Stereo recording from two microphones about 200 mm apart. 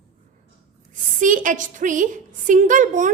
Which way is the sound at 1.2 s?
40° right (ahead or behind).